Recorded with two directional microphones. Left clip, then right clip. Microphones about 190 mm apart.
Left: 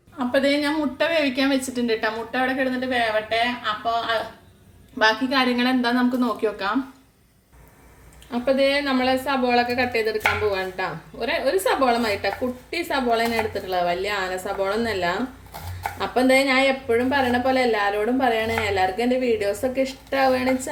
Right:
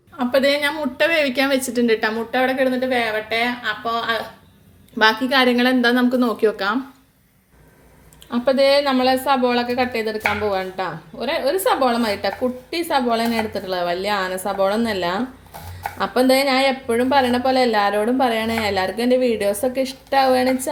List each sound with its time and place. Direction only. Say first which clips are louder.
0.2 s a woman's voice: right 3 dB; 50° right (ahead or behind)
8.3 s a woman's voice: right 4 dB; 40° right (ahead or behind)